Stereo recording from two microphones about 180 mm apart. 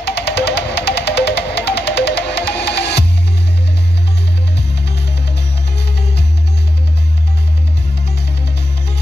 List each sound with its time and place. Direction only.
0.0 s music: 70° left (ahead or behind)